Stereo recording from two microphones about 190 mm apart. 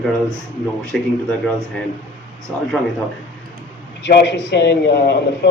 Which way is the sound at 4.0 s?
65° left (ahead or behind).